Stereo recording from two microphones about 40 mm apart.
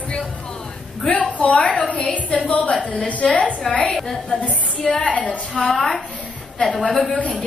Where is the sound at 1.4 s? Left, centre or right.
Left.